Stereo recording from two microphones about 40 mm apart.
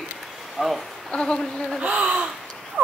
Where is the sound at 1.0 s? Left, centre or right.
Centre.